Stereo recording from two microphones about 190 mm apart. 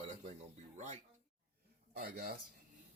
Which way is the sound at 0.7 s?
40° right (ahead or behind).